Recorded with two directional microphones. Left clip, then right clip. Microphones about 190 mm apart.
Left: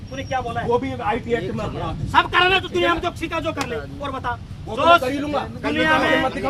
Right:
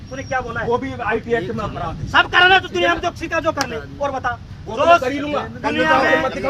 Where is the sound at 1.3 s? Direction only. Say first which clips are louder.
Right 3 dB; 55° right (ahead or behind).